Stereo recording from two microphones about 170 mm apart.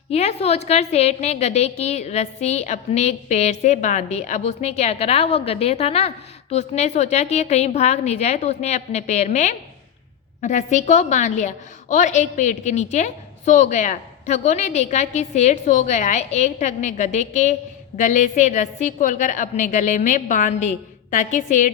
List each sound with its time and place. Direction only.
0.1 s a woman's voice: 40° left (ahead or behind)